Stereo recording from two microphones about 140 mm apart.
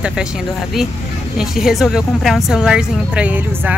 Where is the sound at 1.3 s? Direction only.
5° right (ahead or behind).